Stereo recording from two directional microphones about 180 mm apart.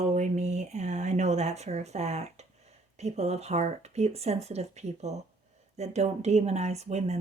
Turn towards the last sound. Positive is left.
turn(degrees=-40)  # may be behind; listen again after turning